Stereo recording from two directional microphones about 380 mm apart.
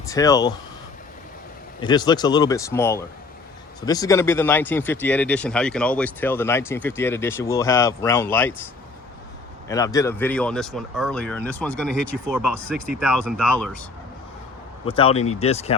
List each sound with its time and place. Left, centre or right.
0.1 s speech: centre
1.8 s speech: centre
9.6 s speech: centre
14.8 s speech: centre